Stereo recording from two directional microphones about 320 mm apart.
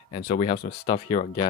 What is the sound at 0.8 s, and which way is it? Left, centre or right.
Speech, centre.